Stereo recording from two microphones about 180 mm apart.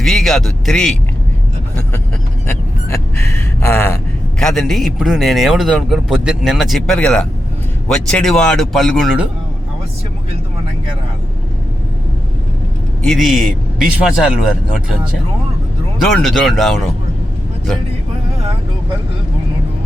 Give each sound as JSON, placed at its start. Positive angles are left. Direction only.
{"t": 0.0, "sound": "a man's voice", "side_deg": 0}
{"t": 2.5, "sound": "speech", "side_deg": 15}
{"t": 4.4, "sound": "a man's voice", "side_deg": 0}
{"t": 13.1, "sound": "a man's voice", "side_deg": 0}
{"t": 16.0, "sound": "a man's voice", "side_deg": 0}